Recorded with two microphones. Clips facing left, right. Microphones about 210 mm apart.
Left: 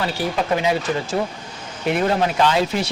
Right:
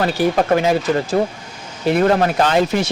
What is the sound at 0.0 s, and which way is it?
Speech, 50° right (ahead or behind).